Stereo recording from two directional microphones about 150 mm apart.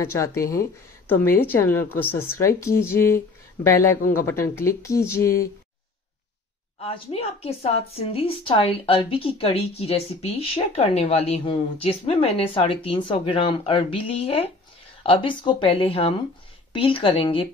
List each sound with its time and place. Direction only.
0.0 s a woman's voice: 20° left (ahead or behind)
6.8 s speech: 40° left (ahead or behind)